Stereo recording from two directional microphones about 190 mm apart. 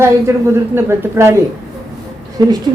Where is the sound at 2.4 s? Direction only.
20° right (ahead or behind).